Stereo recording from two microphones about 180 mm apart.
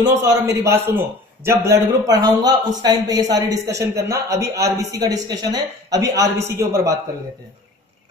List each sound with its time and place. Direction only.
0.1 s a man's voice: 15° right (ahead or behind)